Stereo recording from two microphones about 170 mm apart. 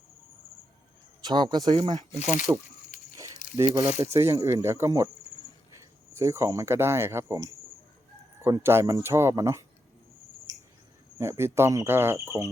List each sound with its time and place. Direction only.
1.2 s speech: 25° right (ahead or behind)
2.1 s speech: 45° left (ahead or behind)
3.4 s squish: 50° left (ahead or behind)
4.0 s speech: 15° right (ahead or behind)
6.1 s speech: 15° right (ahead or behind)
10.5 s cricket: 20° right (ahead or behind)
11.2 s speech: 15° right (ahead or behind)